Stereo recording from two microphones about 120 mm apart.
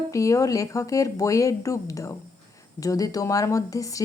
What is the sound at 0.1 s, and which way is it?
Speech, 25° left (ahead or behind).